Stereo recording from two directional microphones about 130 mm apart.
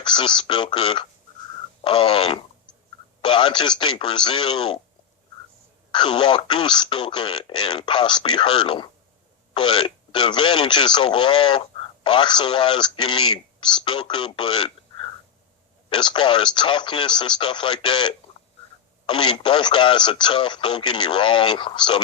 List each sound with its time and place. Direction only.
0.0 s speech: 40° left (ahead or behind)
5.9 s speech: 40° left (ahead or behind)